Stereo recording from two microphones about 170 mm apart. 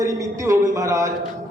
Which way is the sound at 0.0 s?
20° right (ahead or behind).